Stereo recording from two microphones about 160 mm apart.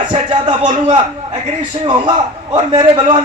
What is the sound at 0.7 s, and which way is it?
Speech, 30° right (ahead or behind).